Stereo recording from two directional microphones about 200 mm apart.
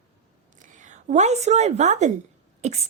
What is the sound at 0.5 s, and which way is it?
A woman's voice, 40° right (ahead or behind).